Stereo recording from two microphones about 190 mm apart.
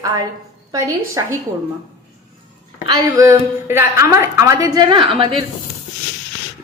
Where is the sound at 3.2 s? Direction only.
15° right (ahead or behind).